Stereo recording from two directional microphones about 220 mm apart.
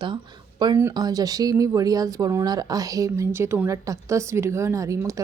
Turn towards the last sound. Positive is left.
turn(degrees=-15)  # may be behind; listen again after turning